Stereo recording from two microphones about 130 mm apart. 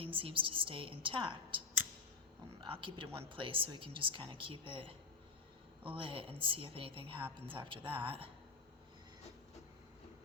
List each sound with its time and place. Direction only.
0.0 s speech: 40° right (ahead or behind)